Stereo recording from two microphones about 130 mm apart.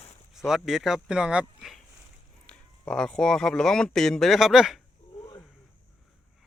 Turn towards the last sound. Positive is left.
turn(degrees=-5)  # may be behind; listen again after turning